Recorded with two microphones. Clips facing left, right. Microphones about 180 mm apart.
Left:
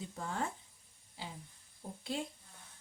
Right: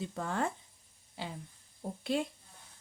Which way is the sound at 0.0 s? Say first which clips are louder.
Right 5 dB; 70° right (ahead or behind).